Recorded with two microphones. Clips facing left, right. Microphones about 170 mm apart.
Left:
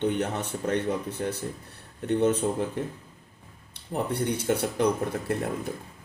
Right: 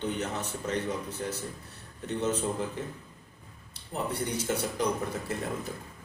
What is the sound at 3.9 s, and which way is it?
Speech, 60° left (ahead or behind).